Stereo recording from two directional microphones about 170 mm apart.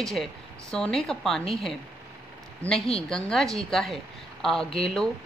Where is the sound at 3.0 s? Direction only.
5° left (ahead or behind).